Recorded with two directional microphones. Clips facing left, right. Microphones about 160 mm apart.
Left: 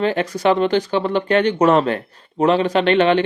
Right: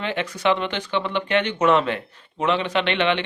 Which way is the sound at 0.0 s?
40° left (ahead or behind).